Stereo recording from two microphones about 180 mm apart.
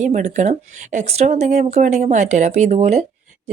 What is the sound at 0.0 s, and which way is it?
Speech, 40° right (ahead or behind).